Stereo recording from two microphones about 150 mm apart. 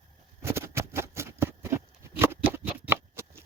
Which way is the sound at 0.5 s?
15° right (ahead or behind).